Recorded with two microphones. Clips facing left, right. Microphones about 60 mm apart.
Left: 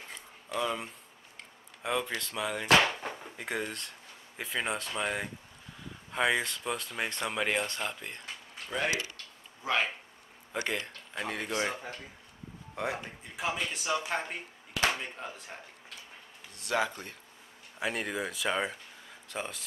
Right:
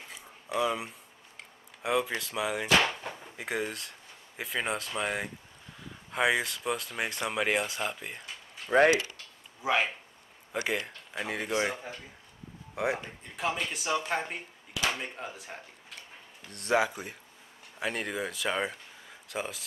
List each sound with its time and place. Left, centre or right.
0.6 s speech: centre
8.7 s speech: right
9.1 s a sound: centre
10.5 s speech: centre
12.7 s speech: centre
13.4 s speech: centre
16.7 s speech: centre